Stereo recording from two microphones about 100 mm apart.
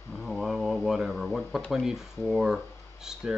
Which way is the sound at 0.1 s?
Centre (ahead or behind).